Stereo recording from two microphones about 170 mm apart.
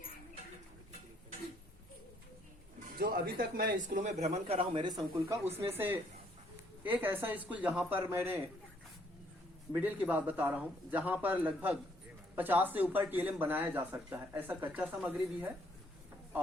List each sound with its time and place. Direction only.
2.9 s a man's voice: 60° right (ahead or behind); by 5.4 s 25° right (ahead or behind)
5.5 s speech: 15° right (ahead or behind)
9.7 s speech: 10° right (ahead or behind)